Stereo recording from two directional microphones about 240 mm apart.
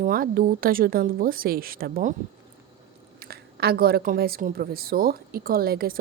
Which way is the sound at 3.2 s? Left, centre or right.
Right.